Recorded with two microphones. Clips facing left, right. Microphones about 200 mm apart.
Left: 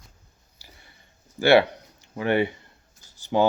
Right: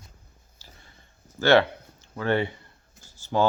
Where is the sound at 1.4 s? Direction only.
15° left (ahead or behind).